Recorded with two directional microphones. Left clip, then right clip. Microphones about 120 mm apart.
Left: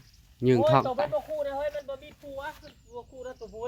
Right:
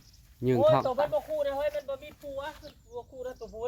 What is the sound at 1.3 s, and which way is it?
Speech, 40° right (ahead or behind).